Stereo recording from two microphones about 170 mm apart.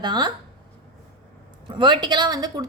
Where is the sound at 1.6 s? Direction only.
25° right (ahead or behind).